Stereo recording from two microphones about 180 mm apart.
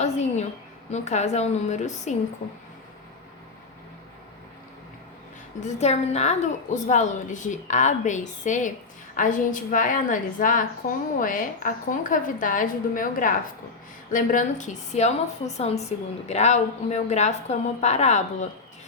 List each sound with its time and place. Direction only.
0.0 s a woman's voice: 40° left (ahead or behind)
5.5 s a woman's voice: 40° left (ahead or behind)